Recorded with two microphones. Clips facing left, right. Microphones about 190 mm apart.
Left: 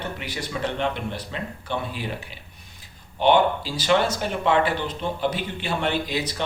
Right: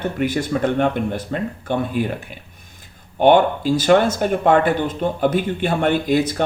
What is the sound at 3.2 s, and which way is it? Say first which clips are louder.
Speech: right 5 dB; 50° right (ahead or behind).